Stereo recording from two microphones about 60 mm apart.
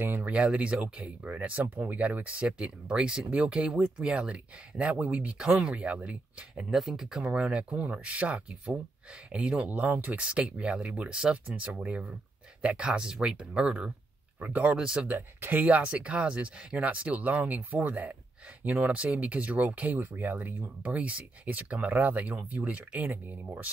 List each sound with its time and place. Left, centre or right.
0.0 s speech: right
0.3 s speech: centre
6.5 s speech: centre
7.2 s speech: centre
9.6 s speech: right
10.1 s speech: centre
11.4 s speech: right
11.8 s speech: centre
15.0 s speech: right